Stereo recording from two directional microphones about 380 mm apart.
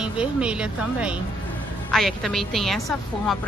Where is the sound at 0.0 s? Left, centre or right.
Centre.